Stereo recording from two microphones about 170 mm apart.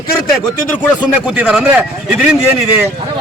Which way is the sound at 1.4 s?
5° right (ahead or behind).